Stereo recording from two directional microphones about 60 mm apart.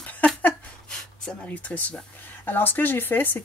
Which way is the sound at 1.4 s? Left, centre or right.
Left.